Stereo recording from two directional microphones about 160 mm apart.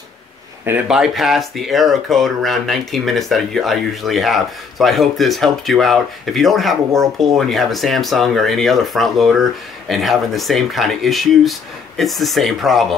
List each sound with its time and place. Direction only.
0.7 s speech: 5° right (ahead or behind)